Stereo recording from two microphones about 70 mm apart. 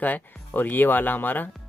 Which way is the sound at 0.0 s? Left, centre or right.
Left.